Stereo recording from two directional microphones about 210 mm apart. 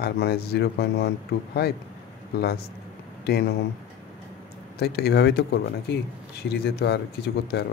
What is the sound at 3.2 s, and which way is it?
Speech, 50° left (ahead or behind).